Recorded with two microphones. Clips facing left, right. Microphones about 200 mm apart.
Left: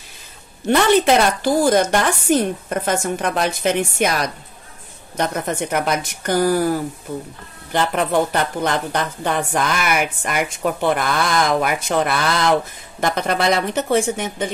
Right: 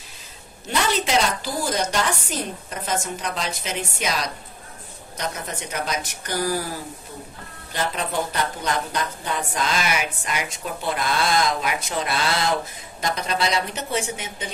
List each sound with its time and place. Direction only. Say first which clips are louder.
0.7 s a woman's voice: left 9 dB; 60° left (ahead or behind)